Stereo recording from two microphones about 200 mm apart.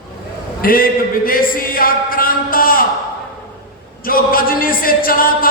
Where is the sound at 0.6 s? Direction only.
45° left (ahead or behind).